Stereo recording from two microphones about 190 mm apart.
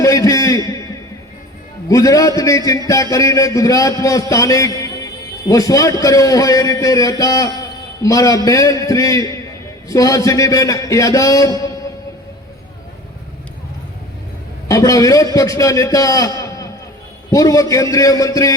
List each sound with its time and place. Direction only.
0.0 s a sound: 15° left (ahead or behind)
1.9 s a man's voice: 15° left (ahead or behind)
14.7 s a man's voice: 20° left (ahead or behind)